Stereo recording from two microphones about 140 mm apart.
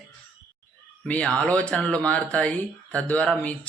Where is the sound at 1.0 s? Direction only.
10° left (ahead or behind).